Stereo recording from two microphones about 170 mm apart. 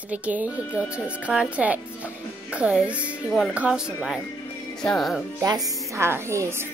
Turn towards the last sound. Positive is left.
turn(degrees=-15)  # may be behind; listen again after turning